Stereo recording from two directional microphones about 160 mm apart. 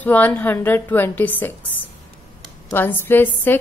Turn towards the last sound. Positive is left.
turn(degrees=10)  # may be behind; listen again after turning